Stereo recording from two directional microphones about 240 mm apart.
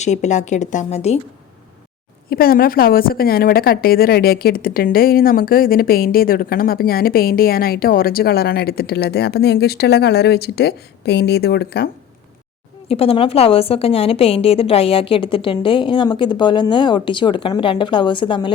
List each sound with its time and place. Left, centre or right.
0.0 s a woman's voice: left
2.3 s a woman's voice: left
12.9 s a woman's voice: left